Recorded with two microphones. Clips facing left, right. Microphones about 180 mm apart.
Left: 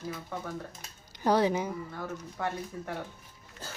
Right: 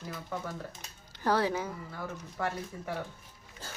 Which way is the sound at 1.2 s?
15° left (ahead or behind).